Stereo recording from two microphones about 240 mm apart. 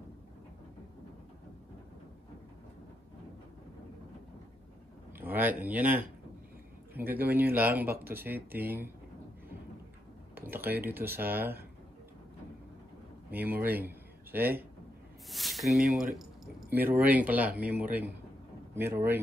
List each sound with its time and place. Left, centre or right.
5.2 s speech: centre
7.2 s speech: centre
10.3 s cutlery: centre
10.8 s speech: centre
13.3 s speech: centre
15.9 s speech: right
16.2 s speech: centre